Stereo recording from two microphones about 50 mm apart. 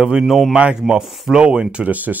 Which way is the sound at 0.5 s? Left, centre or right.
Centre.